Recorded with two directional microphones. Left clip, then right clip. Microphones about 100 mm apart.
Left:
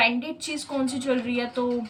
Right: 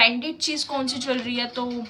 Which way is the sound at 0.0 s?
30° right (ahead or behind).